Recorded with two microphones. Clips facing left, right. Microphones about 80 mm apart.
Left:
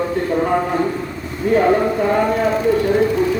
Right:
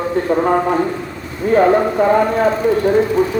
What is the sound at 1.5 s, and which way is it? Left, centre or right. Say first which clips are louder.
A man's voice: right 2 dB; right.